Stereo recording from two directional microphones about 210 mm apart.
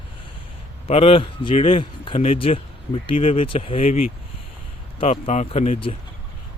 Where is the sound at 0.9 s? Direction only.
25° left (ahead or behind).